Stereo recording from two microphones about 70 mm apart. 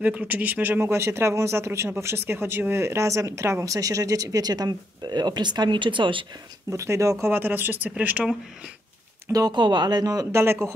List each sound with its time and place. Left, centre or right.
0.0 s speech: centre; by 3.7 s right
3.7 s speech: right
6.7 s speech: right
7.2 s speech: right
9.3 s speech: right
10.3 s speech: right